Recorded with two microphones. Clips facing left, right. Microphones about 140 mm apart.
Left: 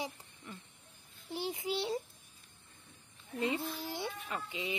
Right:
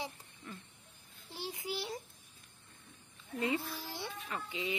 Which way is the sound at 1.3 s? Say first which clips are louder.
Left 5 dB; 20° left (ahead or behind).